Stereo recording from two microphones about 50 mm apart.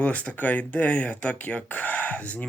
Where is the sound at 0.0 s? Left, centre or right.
Left.